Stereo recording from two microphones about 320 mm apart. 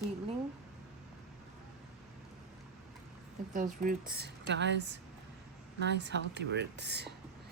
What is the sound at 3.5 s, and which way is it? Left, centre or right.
Speech, right.